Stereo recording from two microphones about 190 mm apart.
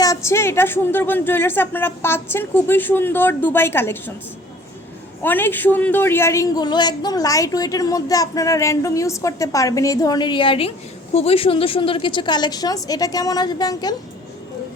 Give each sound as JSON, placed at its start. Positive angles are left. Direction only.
{"t": 0.0, "sound": "speech", "side_deg": 15}
{"t": 5.2, "sound": "a man's voice", "side_deg": 10}